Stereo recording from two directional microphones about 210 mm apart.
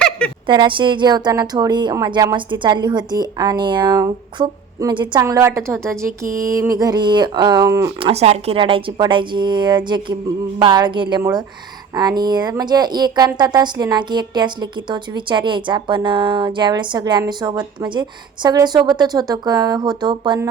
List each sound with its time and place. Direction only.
0.4 s speech: 20° right (ahead or behind)
6.3 s a sound: 15° right (ahead or behind)
7.9 s speech: 25° right (ahead or behind)